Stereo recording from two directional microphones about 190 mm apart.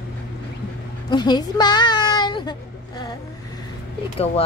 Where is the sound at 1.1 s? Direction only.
20° left (ahead or behind).